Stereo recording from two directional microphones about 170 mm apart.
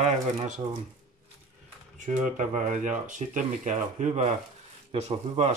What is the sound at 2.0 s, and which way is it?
Speech, 45° right (ahead or behind).